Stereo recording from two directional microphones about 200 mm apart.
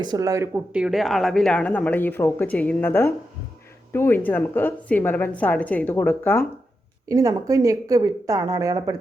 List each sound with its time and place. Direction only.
0.0 s a woman's voice: 20° right (ahead or behind); by 6.4 s 10° left (ahead or behind)
7.1 s a woman's voice: 15° right (ahead or behind)